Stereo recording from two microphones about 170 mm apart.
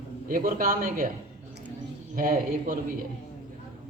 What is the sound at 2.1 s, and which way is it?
Speech, 55° right (ahead or behind).